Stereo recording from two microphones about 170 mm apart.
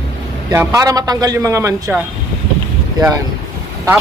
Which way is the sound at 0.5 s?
20° right (ahead or behind).